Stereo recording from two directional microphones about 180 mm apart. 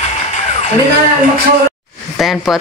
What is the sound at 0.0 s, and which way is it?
Music, 40° left (ahead or behind).